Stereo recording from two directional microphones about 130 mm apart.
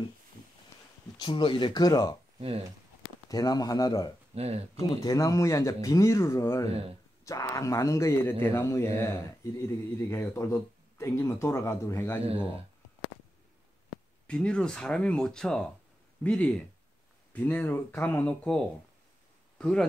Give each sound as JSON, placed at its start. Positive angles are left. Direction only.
{"t": 1.1, "sound": "speech", "side_deg": 40}
{"t": 3.3, "sound": "speech", "side_deg": 30}
{"t": 4.4, "sound": "speech", "side_deg": -55}
{"t": 4.7, "sound": "speech", "side_deg": 30}
{"t": 14.2, "sound": "speech", "side_deg": 5}